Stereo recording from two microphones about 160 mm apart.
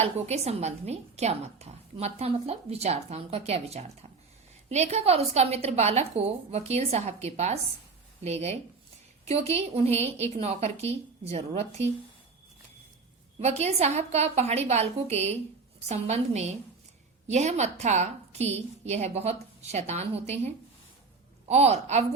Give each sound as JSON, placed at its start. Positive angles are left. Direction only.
{"t": 0.0, "sound": "speech", "side_deg": -40}
{"t": 13.4, "sound": "a woman's voice", "side_deg": -45}